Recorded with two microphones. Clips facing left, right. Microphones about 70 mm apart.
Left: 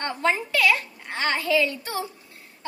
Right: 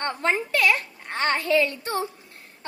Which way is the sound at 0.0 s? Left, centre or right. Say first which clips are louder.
Even; right.